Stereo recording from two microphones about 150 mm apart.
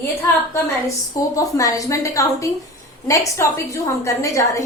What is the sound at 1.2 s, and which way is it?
A woman's voice, 20° left (ahead or behind).